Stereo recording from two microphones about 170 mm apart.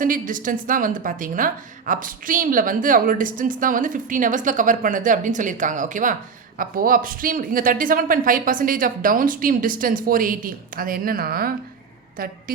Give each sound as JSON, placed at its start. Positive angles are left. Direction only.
{"t": 0.0, "sound": "a woman's voice", "side_deg": -50}